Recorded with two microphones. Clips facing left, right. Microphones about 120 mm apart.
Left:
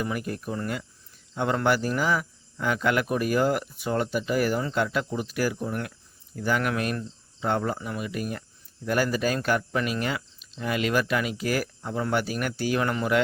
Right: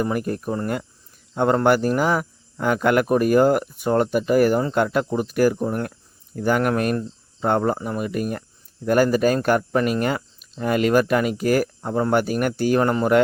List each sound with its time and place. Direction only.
0.0 s cricket: 45° right (ahead or behind)